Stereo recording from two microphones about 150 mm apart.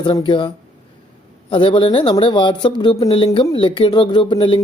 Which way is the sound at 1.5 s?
35° left (ahead or behind).